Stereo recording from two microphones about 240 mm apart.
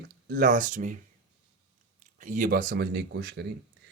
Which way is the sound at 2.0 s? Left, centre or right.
Right.